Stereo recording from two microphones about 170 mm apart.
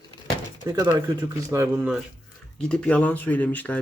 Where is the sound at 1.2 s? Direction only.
15° right (ahead or behind).